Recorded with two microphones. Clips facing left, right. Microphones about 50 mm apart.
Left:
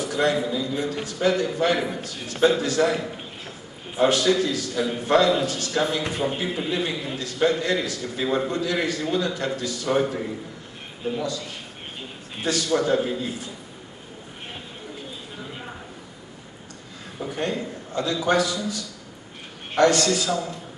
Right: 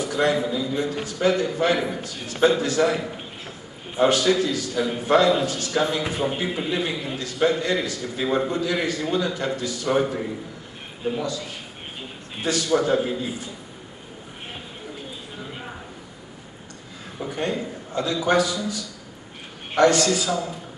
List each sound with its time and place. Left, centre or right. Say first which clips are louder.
0.0 s a man's voice: right 1 dB; centre
17.2 s a man's voice: right 1 dB; centre